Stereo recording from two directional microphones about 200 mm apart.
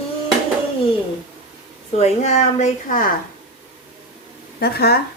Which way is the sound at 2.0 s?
35° left (ahead or behind).